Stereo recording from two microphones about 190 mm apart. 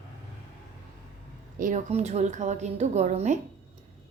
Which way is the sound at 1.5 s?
40° right (ahead or behind).